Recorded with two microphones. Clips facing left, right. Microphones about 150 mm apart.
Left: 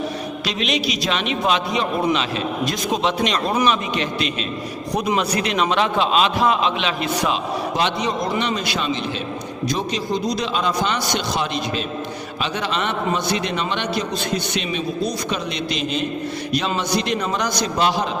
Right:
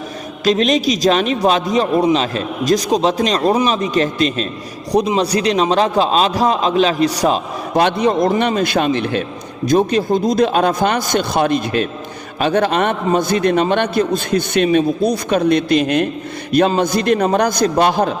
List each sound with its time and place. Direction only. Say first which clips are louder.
0.4 s a man's voice: right 10 dB; 45° right (ahead or behind)
4.9 s a man's voice: right 6 dB; 30° right (ahead or behind)
7.8 s a man's voice: right 10 dB; 55° right (ahead or behind)